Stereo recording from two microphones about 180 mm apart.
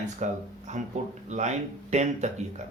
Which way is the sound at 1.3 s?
40° right (ahead or behind).